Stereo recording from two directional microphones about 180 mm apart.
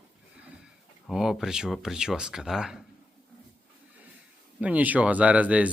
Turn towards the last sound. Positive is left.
turn(degrees=-5)  # may be behind; listen again after turning